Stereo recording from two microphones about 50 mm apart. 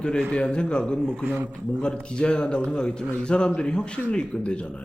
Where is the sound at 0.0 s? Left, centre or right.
Centre.